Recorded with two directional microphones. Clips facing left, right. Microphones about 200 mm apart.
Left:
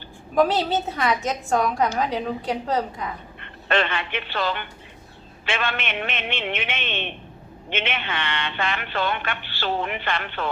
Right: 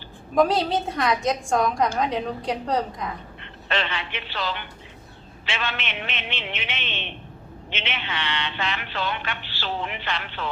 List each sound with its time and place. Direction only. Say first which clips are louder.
0.3 s a woman's voice: even; centre (ahead or behind)
3.4 s speech: left 5 dB; 50° left (ahead or behind)